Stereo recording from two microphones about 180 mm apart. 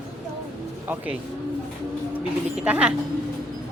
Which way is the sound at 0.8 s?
10° right (ahead or behind).